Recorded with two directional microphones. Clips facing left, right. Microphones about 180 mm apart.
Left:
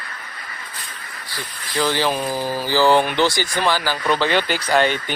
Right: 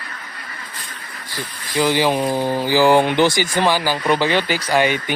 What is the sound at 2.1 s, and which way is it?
Speech, 25° right (ahead or behind).